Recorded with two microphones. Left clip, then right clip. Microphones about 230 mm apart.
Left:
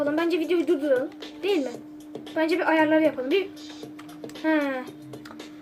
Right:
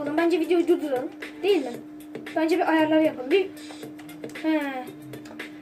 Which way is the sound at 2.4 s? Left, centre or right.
Left.